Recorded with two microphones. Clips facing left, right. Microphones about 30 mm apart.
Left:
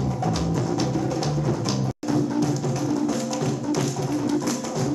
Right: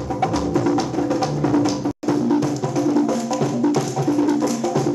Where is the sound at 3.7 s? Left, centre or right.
Centre.